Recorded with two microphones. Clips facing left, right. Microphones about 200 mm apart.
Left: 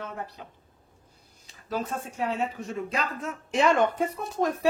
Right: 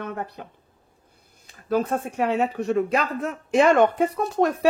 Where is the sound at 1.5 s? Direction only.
55° right (ahead or behind).